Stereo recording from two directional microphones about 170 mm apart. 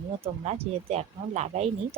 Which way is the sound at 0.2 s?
35° right (ahead or behind).